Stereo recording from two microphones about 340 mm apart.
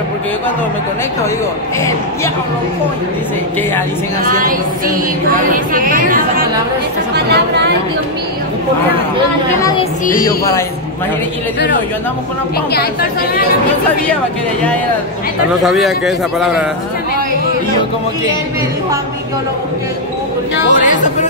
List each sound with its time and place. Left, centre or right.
4.3 s speech: right
9.6 s speech: centre
15.6 s a man's voice: centre
20.7 s speech: left